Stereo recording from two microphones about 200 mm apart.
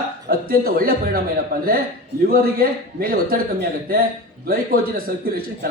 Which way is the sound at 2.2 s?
50° right (ahead or behind).